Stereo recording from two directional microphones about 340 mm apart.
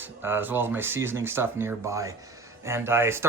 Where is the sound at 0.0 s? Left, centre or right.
Centre.